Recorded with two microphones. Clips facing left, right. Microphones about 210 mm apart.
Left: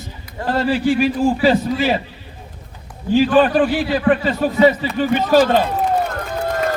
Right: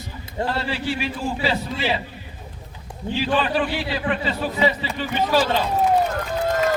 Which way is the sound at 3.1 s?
45° left (ahead or behind).